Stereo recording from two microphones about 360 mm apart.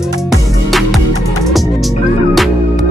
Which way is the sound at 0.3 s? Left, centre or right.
Centre.